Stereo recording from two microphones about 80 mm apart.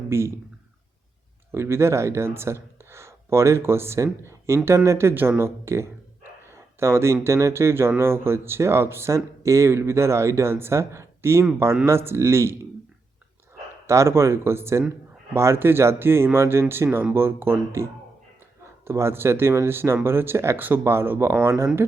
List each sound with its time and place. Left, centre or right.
0.1 s speech: right
1.5 s speech: right
13.8 s speech: right